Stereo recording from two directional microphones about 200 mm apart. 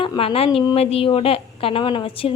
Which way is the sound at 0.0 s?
25° left (ahead or behind).